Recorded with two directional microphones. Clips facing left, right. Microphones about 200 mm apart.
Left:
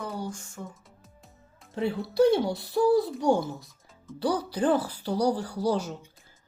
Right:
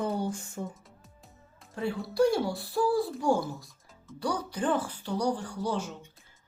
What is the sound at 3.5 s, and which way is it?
Music, centre (ahead or behind).